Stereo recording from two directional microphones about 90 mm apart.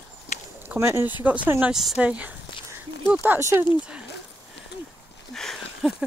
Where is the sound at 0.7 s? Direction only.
30° right (ahead or behind).